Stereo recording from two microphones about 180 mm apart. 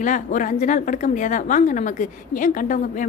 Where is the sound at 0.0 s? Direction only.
45° left (ahead or behind).